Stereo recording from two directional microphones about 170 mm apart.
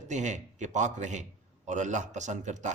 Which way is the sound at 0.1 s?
45° right (ahead or behind).